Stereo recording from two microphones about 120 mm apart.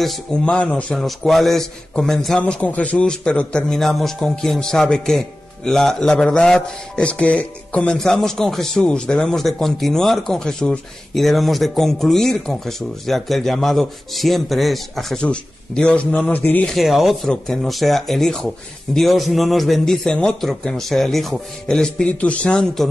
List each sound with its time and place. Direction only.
0.0 s a man's voice: 5° left (ahead or behind)
16.7 s a man's voice: centre (ahead or behind)